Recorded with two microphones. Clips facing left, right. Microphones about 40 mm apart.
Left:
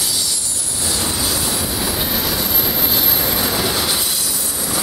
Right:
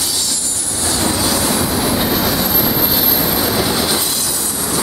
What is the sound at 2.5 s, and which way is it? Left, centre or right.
Vehicle, centre.